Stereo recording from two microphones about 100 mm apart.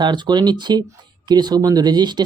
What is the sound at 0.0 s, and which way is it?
Speech, 45° right (ahead or behind).